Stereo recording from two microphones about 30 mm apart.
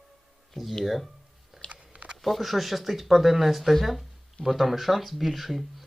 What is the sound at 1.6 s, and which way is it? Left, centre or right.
Chewing, left.